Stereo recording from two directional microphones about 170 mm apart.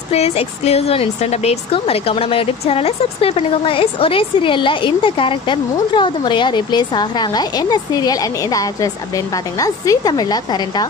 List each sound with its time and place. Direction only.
0.1 s speech: 35° left (ahead or behind)